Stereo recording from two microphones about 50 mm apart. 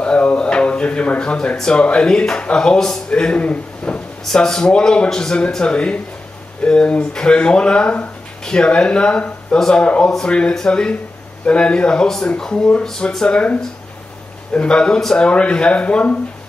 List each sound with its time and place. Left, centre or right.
0.0 s a sound: left
1.2 s speech: left
4.2 s speech: centre
9.6 s speech: centre
14.5 s speech: left